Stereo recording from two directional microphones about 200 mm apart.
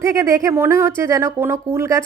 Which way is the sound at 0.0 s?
15° right (ahead or behind).